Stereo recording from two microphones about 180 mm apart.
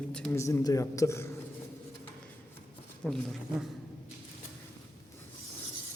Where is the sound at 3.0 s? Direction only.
Centre (ahead or behind).